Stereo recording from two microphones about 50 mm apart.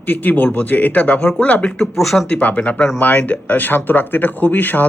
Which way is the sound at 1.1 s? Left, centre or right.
Centre.